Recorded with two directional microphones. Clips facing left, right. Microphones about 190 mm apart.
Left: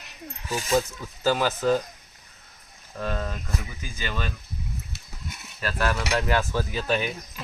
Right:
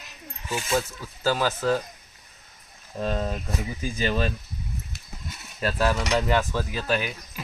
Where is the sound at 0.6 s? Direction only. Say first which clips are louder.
Left 3 dB; 15° left (ahead or behind).